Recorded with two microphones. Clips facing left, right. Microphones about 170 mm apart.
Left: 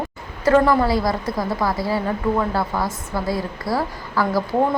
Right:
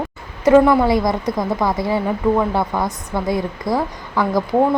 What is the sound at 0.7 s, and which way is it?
Speech, 15° right (ahead or behind).